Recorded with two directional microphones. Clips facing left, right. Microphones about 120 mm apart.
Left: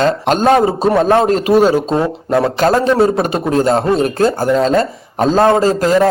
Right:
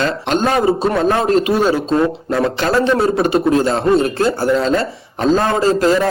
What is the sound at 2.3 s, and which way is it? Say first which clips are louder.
A man's voice: left 6 dB; 40° left (ahead or behind).